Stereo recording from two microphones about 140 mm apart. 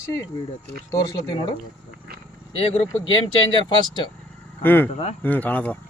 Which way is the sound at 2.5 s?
45° left (ahead or behind).